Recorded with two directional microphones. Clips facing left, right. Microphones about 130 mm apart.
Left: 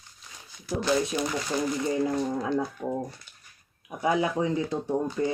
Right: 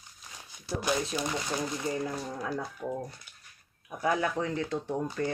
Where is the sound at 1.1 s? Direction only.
15° left (ahead or behind).